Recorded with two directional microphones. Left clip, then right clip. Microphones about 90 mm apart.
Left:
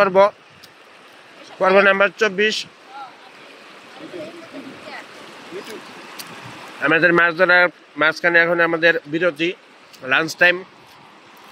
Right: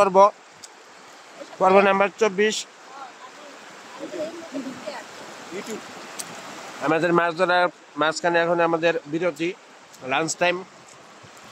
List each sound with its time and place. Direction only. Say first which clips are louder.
0.0 s speech: left 1 dB; 15° right (ahead or behind)
1.6 s speech: left 3 dB; 15° right (ahead or behind)
4.6 s stream: right 5 dB; 20° right (ahead or behind)
6.8 s a man's voice: left 6 dB; centre (ahead or behind)
10.2 s speech: left 7 dB; 10° right (ahead or behind)